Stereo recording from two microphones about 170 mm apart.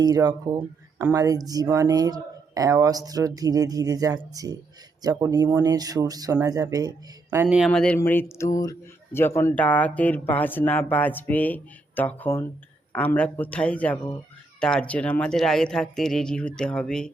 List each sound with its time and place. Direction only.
0.0 s speech: 20° right (ahead or behind)
7.4 s speech: 5° right (ahead or behind)
7.7 s speech: 5° left (ahead or behind)